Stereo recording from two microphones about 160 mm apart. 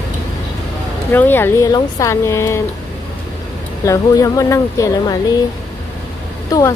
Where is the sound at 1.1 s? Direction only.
15° left (ahead or behind).